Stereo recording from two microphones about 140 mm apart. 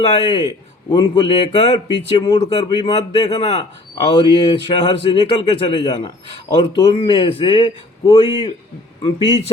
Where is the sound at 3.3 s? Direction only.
45° left (ahead or behind).